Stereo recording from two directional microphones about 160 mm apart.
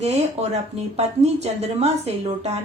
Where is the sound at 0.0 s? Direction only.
40° right (ahead or behind).